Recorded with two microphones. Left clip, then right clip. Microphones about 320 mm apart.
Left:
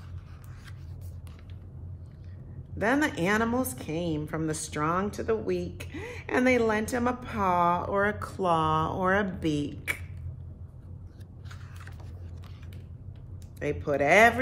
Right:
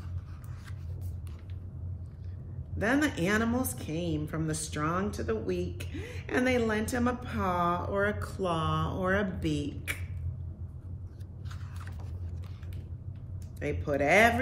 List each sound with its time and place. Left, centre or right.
2.8 s speech: centre
13.6 s speech: left